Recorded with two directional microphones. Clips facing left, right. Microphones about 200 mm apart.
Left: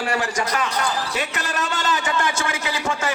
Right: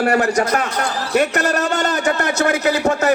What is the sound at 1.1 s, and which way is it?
Speech, 65° right (ahead or behind).